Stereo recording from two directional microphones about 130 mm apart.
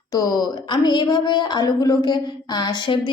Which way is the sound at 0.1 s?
25° left (ahead or behind).